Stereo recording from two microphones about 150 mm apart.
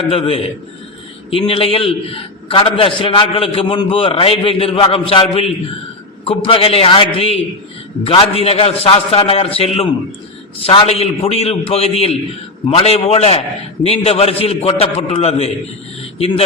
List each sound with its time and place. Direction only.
0.0 s a man's voice: 40° left (ahead or behind)